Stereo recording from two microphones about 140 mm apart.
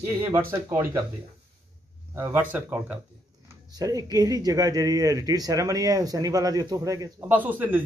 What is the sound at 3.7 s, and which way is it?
Speech, 25° right (ahead or behind).